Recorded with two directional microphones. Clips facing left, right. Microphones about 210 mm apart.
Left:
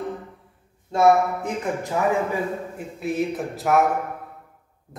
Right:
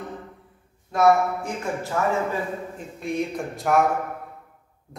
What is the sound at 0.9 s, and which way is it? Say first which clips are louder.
Speech: left 1 dB; 20° left (ahead or behind).